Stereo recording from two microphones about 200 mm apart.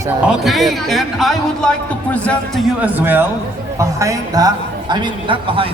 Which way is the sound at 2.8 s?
10° right (ahead or behind).